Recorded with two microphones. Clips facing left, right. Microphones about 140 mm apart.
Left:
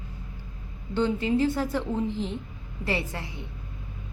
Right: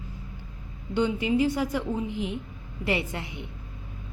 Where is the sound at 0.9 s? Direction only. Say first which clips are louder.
Even; 15° right (ahead or behind).